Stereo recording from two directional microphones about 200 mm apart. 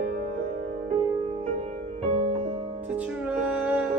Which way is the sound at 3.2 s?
5° right (ahead or behind).